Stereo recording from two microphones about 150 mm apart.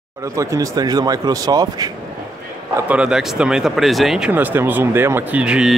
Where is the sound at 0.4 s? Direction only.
20° right (ahead or behind).